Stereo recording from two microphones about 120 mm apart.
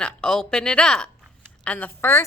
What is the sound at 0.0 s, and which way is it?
A woman's voice, 5° left (ahead or behind).